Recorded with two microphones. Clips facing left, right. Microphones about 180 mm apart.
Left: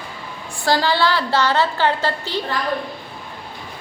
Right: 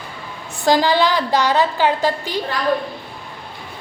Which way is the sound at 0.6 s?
15° right (ahead or behind).